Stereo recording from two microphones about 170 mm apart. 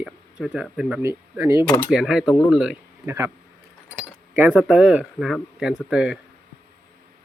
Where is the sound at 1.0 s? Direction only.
15° right (ahead or behind).